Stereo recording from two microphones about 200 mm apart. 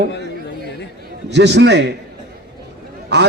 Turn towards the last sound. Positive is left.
turn(degrees=-60)  # may be behind; listen again after turning